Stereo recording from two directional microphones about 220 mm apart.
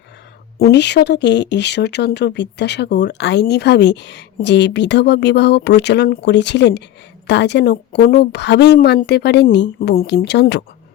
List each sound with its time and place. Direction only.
0.6 s speech: 50° left (ahead or behind)